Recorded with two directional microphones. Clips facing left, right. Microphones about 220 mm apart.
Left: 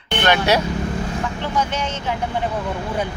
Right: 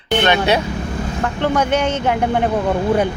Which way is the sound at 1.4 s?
60° right (ahead or behind).